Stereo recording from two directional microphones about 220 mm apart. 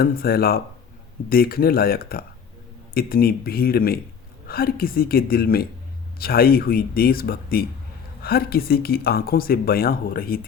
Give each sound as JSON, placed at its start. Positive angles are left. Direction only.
{"t": 0.0, "sound": "speech", "side_deg": 45}